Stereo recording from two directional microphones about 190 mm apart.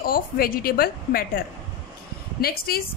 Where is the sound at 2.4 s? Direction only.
55° left (ahead or behind).